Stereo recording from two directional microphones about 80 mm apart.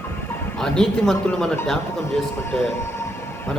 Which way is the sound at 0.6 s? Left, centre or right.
Centre.